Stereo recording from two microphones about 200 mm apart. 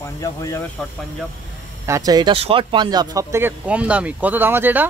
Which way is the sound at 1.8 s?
15° right (ahead or behind).